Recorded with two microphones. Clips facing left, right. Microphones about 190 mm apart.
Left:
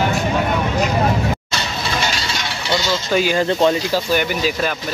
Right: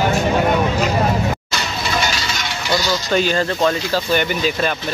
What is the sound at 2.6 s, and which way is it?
Coin, 25° left (ahead or behind).